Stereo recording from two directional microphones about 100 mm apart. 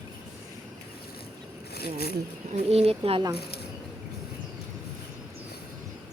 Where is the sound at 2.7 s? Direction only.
85° right.